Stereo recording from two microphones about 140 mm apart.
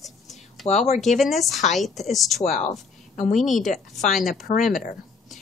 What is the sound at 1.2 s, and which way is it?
A woman's voice, centre (ahead or behind).